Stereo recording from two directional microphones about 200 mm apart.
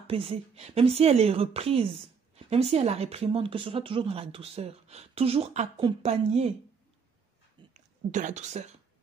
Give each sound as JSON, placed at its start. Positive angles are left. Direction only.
{"t": 0.0, "sound": "a woman's voice", "side_deg": -30}
{"t": 7.7, "sound": "a woman's voice", "side_deg": -35}